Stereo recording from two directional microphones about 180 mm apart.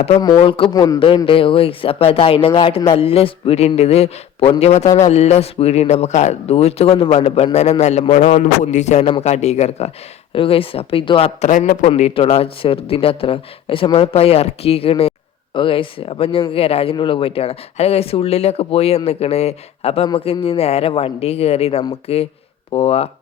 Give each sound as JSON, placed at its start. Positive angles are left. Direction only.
{"t": 0.2, "sound": "speech", "side_deg": 25}